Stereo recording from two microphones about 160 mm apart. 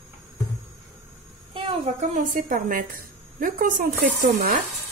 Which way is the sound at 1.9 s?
55° right (ahead or behind).